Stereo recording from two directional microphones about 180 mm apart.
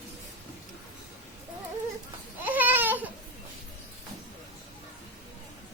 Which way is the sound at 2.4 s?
10° right (ahead or behind).